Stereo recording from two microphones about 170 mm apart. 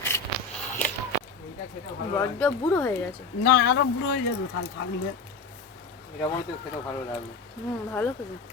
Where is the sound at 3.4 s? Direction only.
70° left (ahead or behind).